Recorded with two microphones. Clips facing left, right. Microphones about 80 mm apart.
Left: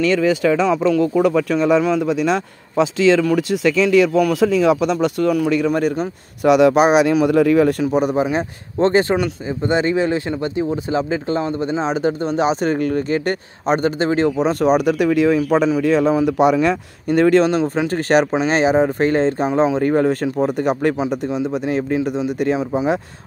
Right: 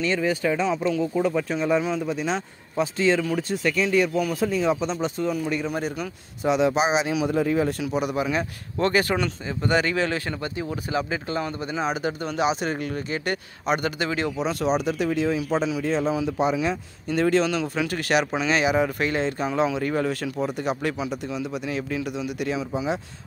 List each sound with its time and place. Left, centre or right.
0.0 s speech: left
5.7 s speech: left
6.4 s speech: left
7.8 s speech: left
21.0 s speech: left